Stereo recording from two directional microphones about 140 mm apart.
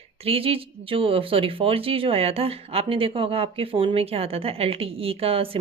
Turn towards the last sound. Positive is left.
turn(degrees=-40)  # may be behind; listen again after turning